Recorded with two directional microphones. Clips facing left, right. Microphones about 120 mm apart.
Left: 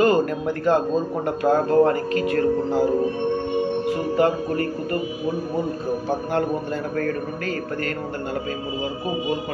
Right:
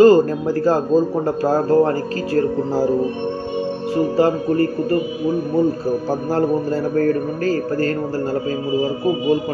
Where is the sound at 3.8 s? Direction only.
30° right (ahead or behind).